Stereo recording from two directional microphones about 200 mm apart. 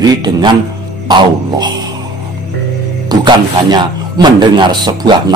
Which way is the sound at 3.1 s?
20° right (ahead or behind).